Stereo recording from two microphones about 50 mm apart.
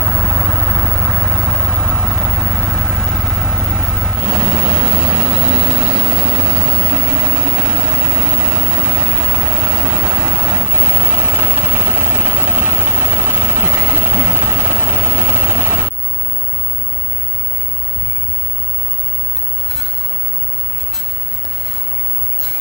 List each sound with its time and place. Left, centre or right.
0.0 s vehicle: centre
4.2 s vehicle: right